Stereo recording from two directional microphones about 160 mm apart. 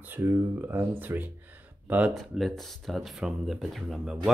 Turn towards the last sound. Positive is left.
turn(degrees=0)  # may be behind; listen again after turning